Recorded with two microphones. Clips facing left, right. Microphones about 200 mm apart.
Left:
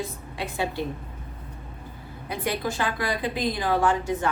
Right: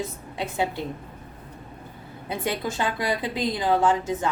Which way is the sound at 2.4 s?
20° right (ahead or behind).